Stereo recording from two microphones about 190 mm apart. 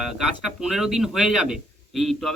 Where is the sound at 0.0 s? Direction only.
Centre (ahead or behind).